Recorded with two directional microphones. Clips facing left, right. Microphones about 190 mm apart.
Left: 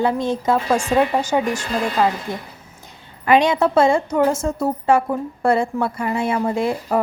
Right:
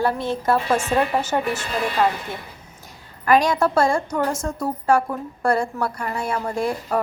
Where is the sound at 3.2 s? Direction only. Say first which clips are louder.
Left 2 dB; 25° left (ahead or behind).